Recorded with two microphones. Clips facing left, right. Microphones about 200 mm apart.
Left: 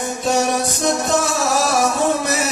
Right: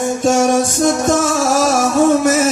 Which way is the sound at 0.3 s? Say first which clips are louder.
Right 5 dB; 45° right (ahead or behind).